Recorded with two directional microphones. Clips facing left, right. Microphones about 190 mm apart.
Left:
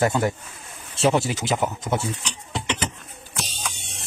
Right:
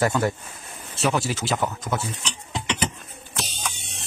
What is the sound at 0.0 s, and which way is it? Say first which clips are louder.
Speech: left 1 dB; 20° left (ahead or behind).